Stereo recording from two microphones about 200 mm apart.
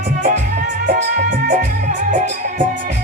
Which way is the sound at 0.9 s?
50° right (ahead or behind).